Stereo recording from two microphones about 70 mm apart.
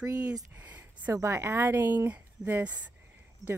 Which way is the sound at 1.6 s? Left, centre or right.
Right.